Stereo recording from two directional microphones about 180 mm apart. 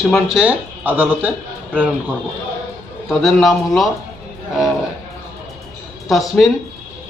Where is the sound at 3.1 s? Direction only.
Centre (ahead or behind).